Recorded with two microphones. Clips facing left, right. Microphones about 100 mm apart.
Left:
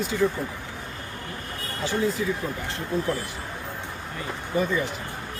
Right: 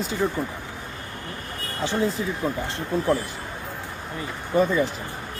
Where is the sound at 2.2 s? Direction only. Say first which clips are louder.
Left 1 dB; 25° right (ahead or behind).